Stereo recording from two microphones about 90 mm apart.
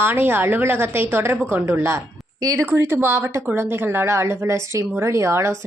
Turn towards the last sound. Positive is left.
turn(degrees=-30)  # may be behind; listen again after turning